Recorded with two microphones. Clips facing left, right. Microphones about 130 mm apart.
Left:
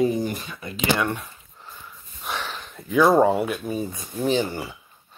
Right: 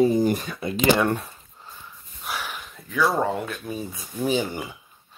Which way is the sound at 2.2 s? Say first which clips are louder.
Left 1 dB; 5° right (ahead or behind).